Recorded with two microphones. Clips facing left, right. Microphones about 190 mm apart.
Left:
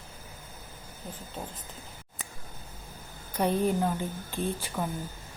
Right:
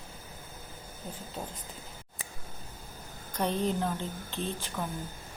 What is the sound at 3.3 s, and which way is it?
A woman's voice, 10° left (ahead or behind).